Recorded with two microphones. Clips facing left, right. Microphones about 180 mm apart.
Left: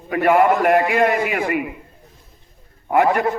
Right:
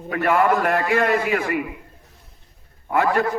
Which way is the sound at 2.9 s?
20° left (ahead or behind).